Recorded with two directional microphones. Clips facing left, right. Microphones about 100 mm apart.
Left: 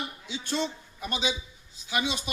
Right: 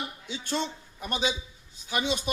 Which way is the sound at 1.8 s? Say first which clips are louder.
Right 1 dB; 40° right (ahead or behind).